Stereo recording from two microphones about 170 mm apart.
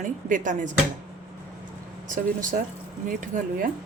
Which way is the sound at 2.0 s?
50° right (ahead or behind).